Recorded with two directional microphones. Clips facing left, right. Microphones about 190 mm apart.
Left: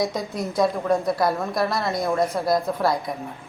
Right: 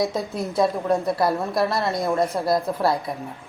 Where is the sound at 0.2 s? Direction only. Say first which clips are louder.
Right 1 dB; 30° right (ahead or behind).